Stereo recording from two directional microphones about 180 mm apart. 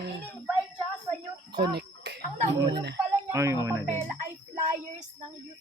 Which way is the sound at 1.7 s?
65° right (ahead or behind).